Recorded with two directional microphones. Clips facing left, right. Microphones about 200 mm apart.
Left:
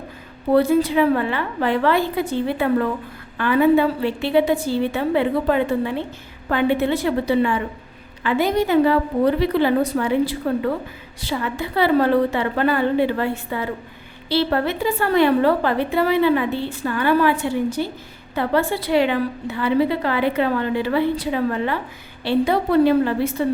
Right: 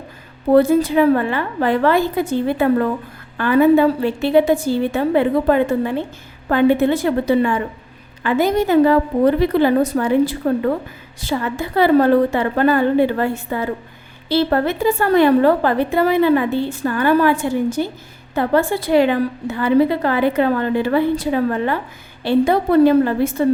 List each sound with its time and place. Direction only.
0.5 s a woman's voice: 45° right (ahead or behind)